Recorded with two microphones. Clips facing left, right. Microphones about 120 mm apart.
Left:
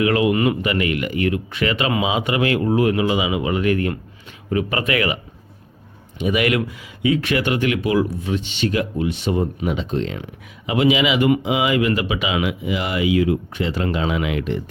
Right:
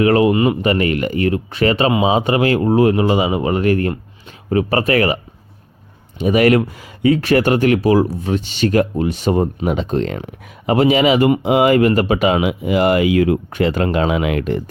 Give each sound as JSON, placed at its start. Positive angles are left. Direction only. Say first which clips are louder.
{"t": 0.0, "sound": "speech", "louder": "right 4 dB", "side_deg": -35}